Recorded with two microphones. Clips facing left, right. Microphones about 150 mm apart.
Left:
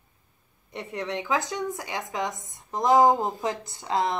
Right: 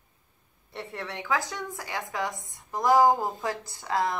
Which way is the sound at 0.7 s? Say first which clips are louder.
Left 5 dB; 20° left (ahead or behind).